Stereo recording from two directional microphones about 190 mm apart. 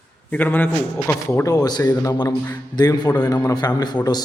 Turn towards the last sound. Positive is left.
turn(degrees=20)  # may be behind; listen again after turning